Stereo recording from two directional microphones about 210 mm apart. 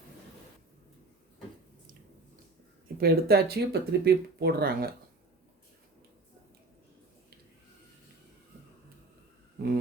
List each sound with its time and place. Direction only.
3.0 s speech: 45° right (ahead or behind)